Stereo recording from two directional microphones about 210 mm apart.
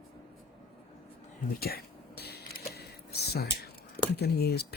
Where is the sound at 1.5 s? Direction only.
45° left (ahead or behind).